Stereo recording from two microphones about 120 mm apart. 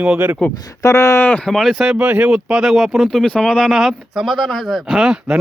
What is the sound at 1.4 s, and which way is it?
Speech, 5° left (ahead or behind).